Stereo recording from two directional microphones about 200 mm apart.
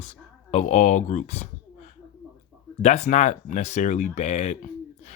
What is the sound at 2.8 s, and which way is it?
Speech, 35° left (ahead or behind).